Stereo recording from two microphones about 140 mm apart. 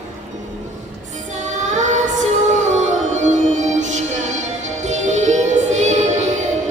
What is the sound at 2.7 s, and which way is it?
Music, 60° right (ahead or behind).